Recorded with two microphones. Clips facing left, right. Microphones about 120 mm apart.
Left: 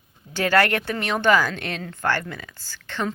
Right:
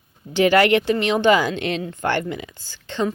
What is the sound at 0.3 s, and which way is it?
Speech, 20° right (ahead or behind).